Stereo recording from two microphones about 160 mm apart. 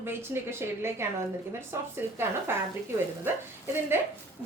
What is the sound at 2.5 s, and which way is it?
Speech, 15° right (ahead or behind).